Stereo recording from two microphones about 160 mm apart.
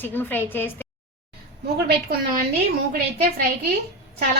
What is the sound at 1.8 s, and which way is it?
Speech, 80° right.